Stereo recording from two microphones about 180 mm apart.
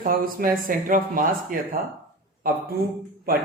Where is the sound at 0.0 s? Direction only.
55° right (ahead or behind).